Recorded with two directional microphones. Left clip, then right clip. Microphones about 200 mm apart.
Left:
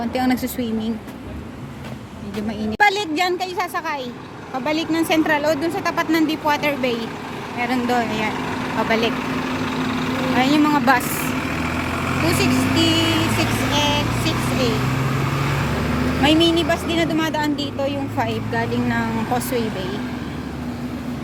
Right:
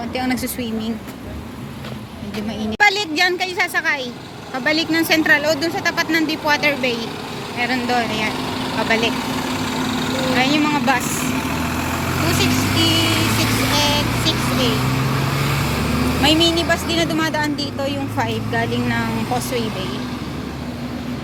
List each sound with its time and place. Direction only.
0.1 s a woman's voice: 20° left (ahead or behind)
2.6 s a woman's voice: 15° left (ahead or behind)
9.6 s lawn mower: 45° right (ahead or behind)
10.3 s speech: 20° left (ahead or behind)
12.3 s speech: 20° left (ahead or behind)
13.7 s vehicle: 5° left (ahead or behind)
16.2 s a woman's voice: 15° left (ahead or behind)
19.3 s speech: 20° left (ahead or behind)